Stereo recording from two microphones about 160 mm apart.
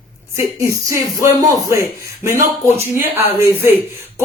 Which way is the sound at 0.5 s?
20° right (ahead or behind).